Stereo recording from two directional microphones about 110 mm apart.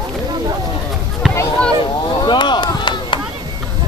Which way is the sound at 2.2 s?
45° left (ahead or behind).